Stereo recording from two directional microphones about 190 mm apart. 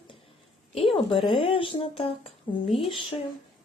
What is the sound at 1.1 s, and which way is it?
Speech, 25° left (ahead or behind).